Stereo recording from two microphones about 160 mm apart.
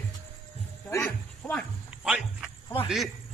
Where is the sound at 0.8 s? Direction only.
10° left (ahead or behind).